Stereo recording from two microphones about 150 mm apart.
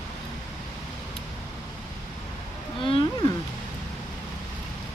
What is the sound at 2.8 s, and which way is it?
Whale vocalization, 35° left (ahead or behind).